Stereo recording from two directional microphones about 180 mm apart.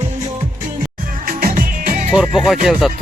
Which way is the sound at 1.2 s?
50° right (ahead or behind).